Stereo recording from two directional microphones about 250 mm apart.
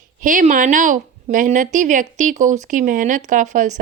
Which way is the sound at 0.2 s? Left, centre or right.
Right.